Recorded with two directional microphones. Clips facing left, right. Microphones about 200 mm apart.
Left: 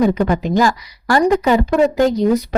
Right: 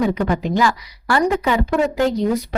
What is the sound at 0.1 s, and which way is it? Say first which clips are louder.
A woman's voice: left 3 dB; 40° left (ahead or behind).